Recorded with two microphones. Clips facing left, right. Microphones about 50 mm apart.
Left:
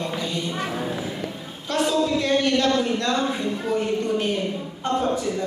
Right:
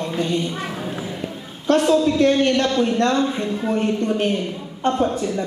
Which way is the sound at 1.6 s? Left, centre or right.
Right.